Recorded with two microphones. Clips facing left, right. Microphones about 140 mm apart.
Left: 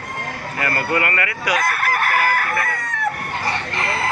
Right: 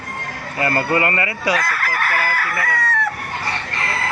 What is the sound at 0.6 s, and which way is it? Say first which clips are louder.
Speech: right 3 dB; 25° right (ahead or behind).